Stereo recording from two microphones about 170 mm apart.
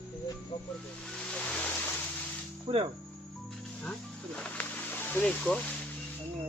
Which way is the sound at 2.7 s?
35° right (ahead or behind).